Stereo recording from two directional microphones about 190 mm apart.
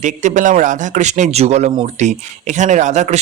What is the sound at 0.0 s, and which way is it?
Speech, 40° right (ahead or behind).